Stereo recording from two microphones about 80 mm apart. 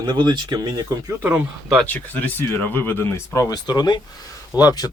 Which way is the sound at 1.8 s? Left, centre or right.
Left.